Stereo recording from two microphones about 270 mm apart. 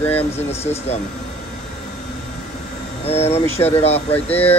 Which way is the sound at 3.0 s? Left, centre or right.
Left.